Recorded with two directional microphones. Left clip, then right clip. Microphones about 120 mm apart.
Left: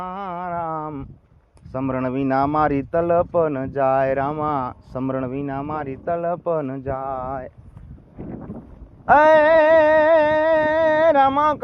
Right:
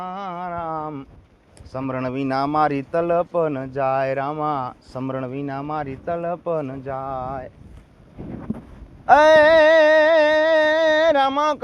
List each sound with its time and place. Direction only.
0.0 s a sound: 30° left (ahead or behind)
1.7 s speech: 40° left (ahead or behind)
5.3 s speech: 30° left (ahead or behind); by 7.5 s 45° left (ahead or behind)
9.0 s music: 30° left (ahead or behind)